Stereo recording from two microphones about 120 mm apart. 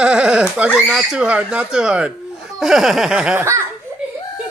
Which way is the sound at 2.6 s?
Centre (ahead or behind).